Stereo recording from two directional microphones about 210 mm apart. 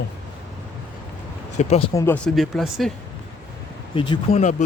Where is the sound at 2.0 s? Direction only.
10° left (ahead or behind).